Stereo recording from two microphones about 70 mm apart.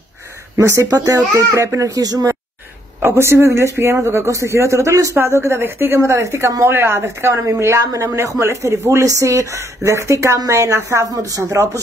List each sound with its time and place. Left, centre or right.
0.6 s speech: right
3.0 s a man's voice: right
5.1 s a man's voice: right